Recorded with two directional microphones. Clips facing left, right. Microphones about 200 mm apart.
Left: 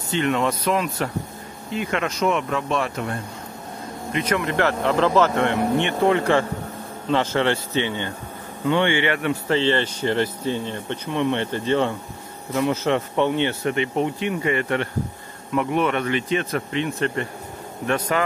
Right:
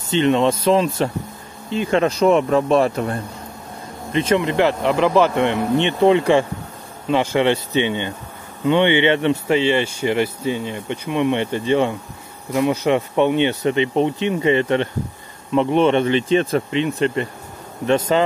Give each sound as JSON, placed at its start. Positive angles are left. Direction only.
{"t": 0.1, "sound": "speech", "side_deg": -25}
{"t": 4.1, "sound": "speech", "side_deg": -25}